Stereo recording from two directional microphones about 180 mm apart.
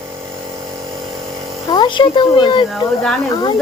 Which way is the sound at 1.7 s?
25° left (ahead or behind).